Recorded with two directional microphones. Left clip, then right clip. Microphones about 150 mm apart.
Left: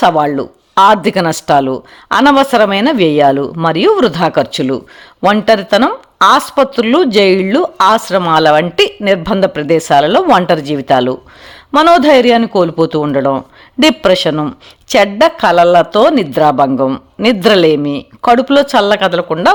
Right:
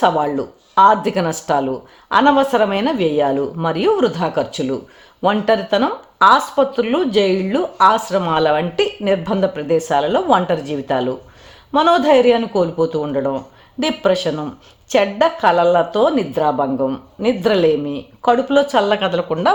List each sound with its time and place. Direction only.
0.0 s a man's voice: 30° left (ahead or behind)